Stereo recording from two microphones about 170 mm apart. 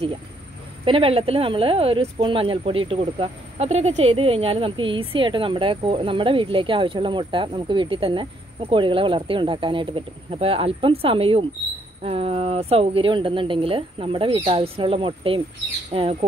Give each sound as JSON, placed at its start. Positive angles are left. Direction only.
{"t": 0.8, "sound": "speech", "side_deg": -35}